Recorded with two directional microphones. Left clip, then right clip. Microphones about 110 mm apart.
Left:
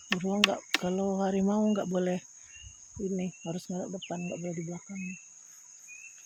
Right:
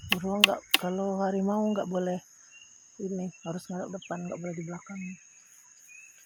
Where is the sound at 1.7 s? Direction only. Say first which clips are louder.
Even; 30° left (ahead or behind).